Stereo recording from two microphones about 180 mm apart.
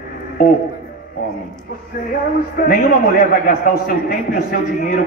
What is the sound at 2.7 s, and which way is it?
A man's voice, 55° left (ahead or behind).